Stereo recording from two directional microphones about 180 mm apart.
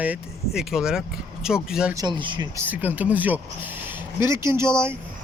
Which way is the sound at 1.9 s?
20° right (ahead or behind).